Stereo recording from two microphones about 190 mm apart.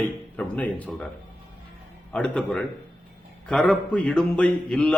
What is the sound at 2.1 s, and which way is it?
A man's voice, 5° left (ahead or behind).